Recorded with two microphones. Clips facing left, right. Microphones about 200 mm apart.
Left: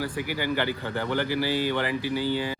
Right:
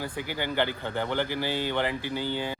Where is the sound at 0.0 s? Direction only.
20° right (ahead or behind).